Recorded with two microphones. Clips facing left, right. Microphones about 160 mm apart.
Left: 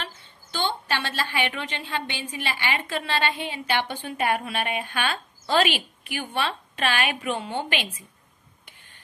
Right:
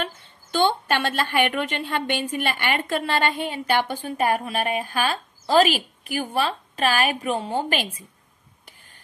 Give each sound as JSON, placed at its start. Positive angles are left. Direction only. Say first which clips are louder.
{"t": 0.0, "sound": "a woman's voice", "louder": "right 7 dB", "side_deg": -55}